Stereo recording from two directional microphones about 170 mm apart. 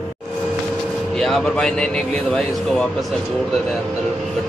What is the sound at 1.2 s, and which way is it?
A man's voice, 5° left (ahead or behind).